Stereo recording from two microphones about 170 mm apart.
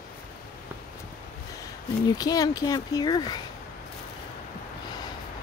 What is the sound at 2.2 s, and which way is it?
Speech, 20° left (ahead or behind).